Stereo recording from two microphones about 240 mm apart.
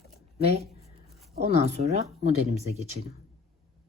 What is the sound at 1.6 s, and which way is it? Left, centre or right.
Speech, right.